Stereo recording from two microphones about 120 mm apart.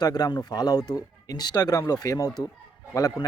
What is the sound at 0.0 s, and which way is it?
Speech, 35° left (ahead or behind).